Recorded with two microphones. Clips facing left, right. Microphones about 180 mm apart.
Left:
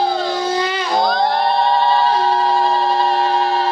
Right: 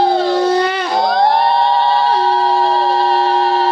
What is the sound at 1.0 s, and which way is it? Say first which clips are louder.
Crowd: right 4 dB; centre (ahead or behind).